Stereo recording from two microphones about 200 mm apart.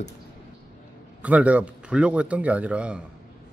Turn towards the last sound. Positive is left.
turn(degrees=-5)  # may be behind; listen again after turning